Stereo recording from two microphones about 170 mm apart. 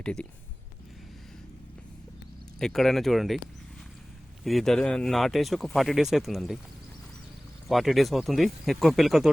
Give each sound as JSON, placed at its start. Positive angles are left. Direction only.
{"t": 0.0, "sound": "speech", "side_deg": 5}
{"t": 2.6, "sound": "speech", "side_deg": 0}
{"t": 4.4, "sound": "speech", "side_deg": 0}
{"t": 7.7, "sound": "speech", "side_deg": 0}